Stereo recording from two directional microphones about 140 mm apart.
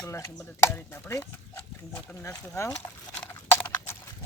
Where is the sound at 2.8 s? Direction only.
40° left (ahead or behind).